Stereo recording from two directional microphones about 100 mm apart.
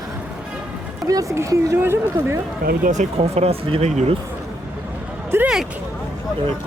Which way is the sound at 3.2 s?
90° right.